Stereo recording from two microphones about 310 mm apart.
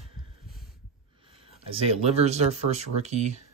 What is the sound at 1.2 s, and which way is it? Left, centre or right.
Speech, centre.